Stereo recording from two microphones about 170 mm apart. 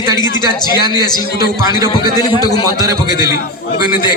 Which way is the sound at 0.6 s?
25° left (ahead or behind).